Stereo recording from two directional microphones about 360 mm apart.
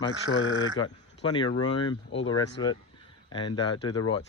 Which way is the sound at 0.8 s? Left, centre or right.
Centre.